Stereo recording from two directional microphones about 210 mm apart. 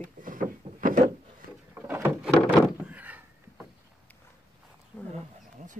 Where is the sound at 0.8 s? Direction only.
40° right (ahead or behind).